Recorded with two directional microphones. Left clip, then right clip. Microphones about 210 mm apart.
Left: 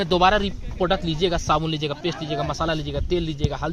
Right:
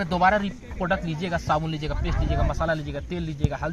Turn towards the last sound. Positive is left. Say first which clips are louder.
# left 3 dB
turn(degrees=50)  # may be behind; listen again after turning